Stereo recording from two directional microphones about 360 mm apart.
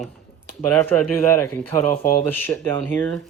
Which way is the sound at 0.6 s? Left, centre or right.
Centre.